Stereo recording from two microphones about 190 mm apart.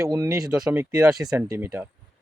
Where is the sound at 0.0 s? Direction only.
15° right (ahead or behind).